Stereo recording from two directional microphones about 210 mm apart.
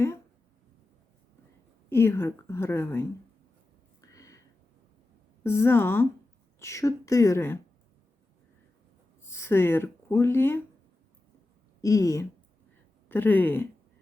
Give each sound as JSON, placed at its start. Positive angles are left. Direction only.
{"t": 1.9, "sound": "a woman's voice", "side_deg": 10}
{"t": 4.0, "sound": "a sound", "side_deg": 15}
{"t": 5.4, "sound": "a woman's voice", "side_deg": 10}
{"t": 9.3, "sound": "speech", "side_deg": 10}
{"t": 11.8, "sound": "a woman's voice", "side_deg": 15}